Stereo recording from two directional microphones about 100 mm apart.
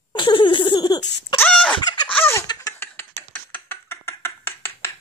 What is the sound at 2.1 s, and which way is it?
Chicken, 20° left (ahead or behind).